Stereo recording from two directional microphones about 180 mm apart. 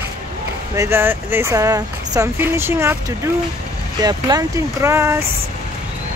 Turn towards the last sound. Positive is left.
turn(degrees=-15)  # may be behind; listen again after turning